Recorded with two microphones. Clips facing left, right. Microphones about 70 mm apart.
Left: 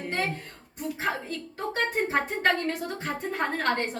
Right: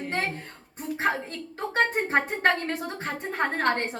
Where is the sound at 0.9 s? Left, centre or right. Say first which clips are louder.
Right 5 dB; right.